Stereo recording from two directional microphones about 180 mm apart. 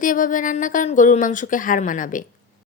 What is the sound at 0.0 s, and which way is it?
Speech, 45° left (ahead or behind).